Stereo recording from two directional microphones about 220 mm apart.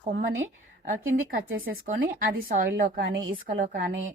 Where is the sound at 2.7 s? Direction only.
50° right (ahead or behind).